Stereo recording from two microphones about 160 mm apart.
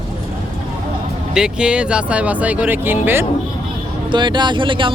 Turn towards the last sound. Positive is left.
turn(degrees=-30)  # may be behind; listen again after turning